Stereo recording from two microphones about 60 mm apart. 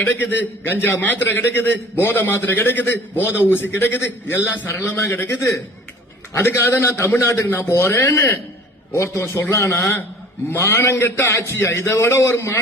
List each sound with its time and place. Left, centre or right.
0.0 s a man's voice: left